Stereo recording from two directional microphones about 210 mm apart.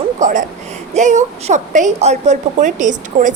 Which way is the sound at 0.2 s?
35° right (ahead or behind).